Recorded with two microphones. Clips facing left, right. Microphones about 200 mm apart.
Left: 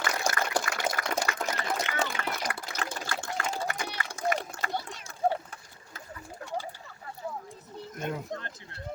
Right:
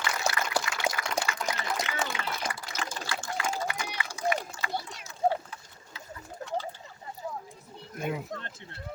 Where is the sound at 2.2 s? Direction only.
60° left (ahead or behind).